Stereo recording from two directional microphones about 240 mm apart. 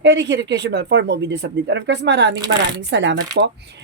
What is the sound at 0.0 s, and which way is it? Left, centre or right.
Speech, right.